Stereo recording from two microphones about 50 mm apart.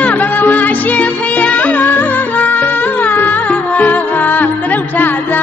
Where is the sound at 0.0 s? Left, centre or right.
Left.